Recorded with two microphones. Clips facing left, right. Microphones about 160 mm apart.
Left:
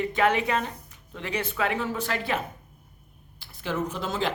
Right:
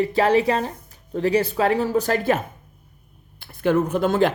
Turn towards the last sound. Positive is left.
turn(degrees=-55)  # may be behind; listen again after turning